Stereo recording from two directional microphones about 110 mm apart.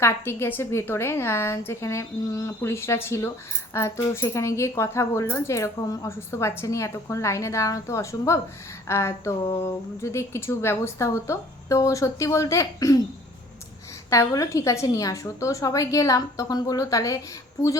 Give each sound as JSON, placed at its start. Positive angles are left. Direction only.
{"t": 0.0, "sound": "speech", "side_deg": 25}
{"t": 14.1, "sound": "speech", "side_deg": 30}